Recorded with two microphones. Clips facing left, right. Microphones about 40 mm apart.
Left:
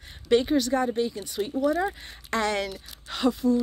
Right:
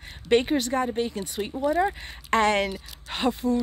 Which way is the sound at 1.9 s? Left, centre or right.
Right.